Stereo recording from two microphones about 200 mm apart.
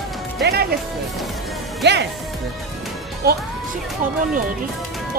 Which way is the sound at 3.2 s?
50° right (ahead or behind).